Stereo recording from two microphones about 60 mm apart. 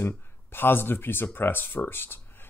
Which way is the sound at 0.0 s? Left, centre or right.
Left.